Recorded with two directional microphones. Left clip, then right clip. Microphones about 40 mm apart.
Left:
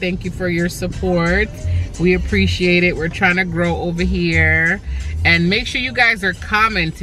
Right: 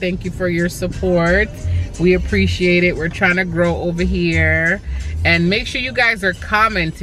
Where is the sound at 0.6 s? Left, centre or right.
Left.